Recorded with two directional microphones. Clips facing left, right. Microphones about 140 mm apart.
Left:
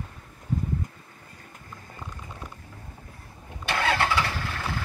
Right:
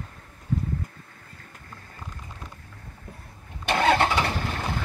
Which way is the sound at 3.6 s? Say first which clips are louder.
Right 4 dB; 20° right (ahead or behind).